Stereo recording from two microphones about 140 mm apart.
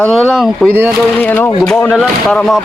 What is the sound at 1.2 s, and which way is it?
Speech, 10° left (ahead or behind).